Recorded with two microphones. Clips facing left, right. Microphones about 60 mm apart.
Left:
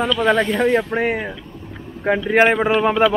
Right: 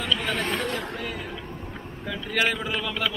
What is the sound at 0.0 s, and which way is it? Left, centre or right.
Speech, left.